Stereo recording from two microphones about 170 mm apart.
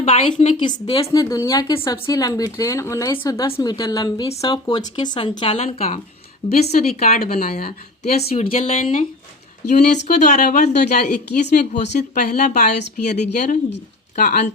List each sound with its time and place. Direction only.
0.0 s a woman's voice: 40° left (ahead or behind)
7.2 s speech: 60° left (ahead or behind)
8.3 s a woman's voice: 35° left (ahead or behind)